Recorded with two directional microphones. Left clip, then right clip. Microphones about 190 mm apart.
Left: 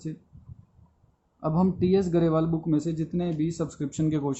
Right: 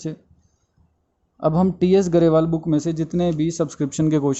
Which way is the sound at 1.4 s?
35° right (ahead or behind).